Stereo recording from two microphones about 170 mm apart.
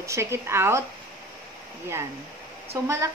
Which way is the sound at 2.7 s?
20° right (ahead or behind).